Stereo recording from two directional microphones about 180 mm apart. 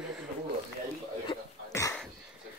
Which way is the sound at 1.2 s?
20° left (ahead or behind).